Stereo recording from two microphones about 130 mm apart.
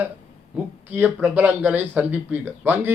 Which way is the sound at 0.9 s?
15° right (ahead or behind).